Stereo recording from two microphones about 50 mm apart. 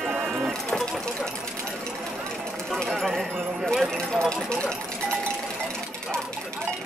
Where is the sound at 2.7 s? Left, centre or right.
Centre.